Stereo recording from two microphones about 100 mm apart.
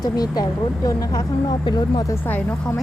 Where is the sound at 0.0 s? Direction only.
40° left (ahead or behind).